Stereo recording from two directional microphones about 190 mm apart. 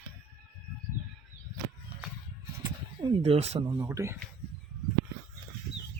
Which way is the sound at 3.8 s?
15° right (ahead or behind).